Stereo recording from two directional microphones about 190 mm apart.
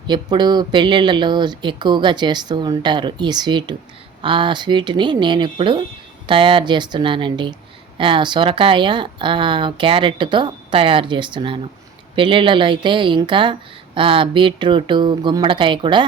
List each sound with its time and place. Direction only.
0.1 s a woman's voice: 25° right (ahead or behind)